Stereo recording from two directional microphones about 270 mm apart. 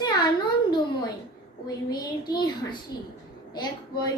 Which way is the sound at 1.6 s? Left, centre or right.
Centre.